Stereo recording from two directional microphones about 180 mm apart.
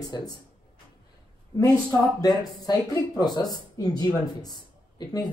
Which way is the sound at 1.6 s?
15° left (ahead or behind).